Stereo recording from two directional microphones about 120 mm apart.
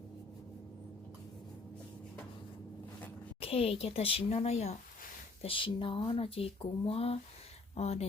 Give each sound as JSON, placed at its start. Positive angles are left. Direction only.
{"t": 3.4, "sound": "speech", "side_deg": 55}
{"t": 5.4, "sound": "speech", "side_deg": 45}